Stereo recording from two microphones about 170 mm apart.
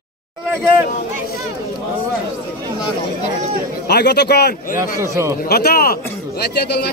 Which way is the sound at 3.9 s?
75° left (ahead or behind).